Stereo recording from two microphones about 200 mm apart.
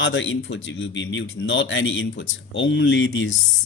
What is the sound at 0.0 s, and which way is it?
Speech, 70° left (ahead or behind).